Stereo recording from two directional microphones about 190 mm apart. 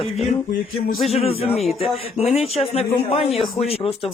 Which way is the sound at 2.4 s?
30° left (ahead or behind).